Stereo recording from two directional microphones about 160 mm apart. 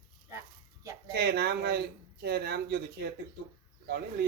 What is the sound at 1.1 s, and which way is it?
A man's voice, 90° right.